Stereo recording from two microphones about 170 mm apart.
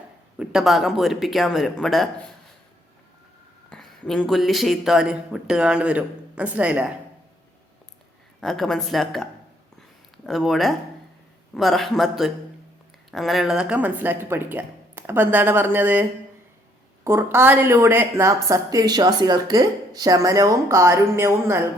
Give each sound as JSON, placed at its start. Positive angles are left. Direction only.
{"t": 0.3, "sound": "speech", "side_deg": 0}
{"t": 3.7, "sound": "speech", "side_deg": 5}
{"t": 8.4, "sound": "speech", "side_deg": 0}
{"t": 10.2, "sound": "a woman's voice", "side_deg": 0}